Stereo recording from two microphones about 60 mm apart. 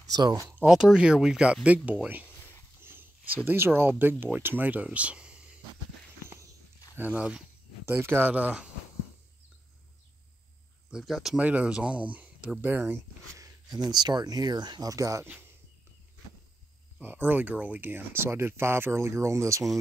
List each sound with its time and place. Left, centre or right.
0.0 s speech: right
0.7 s speech: centre
2.2 s a sound: left
2.8 s a sound: right
3.4 s speech: right
4.8 s speech: centre
6.2 s walk: right
7.0 s speech: right
7.8 s speech: right
10.9 s speech: centre
11.3 s speech: right
13.4 s speech: right
17.0 s speech: right